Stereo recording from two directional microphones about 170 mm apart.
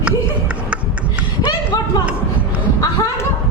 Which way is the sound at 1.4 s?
25° left (ahead or behind).